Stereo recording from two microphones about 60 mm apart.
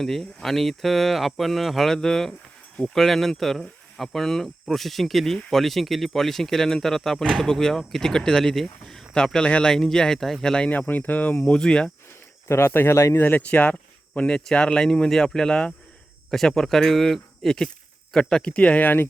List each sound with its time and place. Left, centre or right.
0.0 s speech: centre
10.7 s speech: left
11.4 s speech: centre
12.5 s speech: left
13.1 s speech: left
13.5 s speech: left